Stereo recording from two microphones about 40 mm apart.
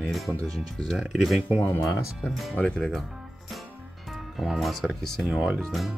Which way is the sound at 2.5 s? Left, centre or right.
Left.